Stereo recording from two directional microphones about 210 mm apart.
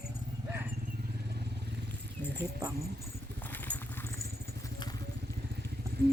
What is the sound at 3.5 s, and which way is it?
Horse, 10° left (ahead or behind).